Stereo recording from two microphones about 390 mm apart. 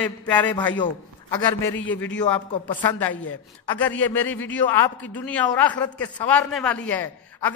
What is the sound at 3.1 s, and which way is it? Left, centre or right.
Speech, left.